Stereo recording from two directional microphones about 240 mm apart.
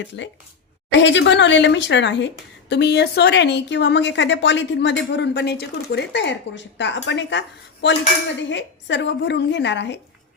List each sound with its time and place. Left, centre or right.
0.1 s speech: left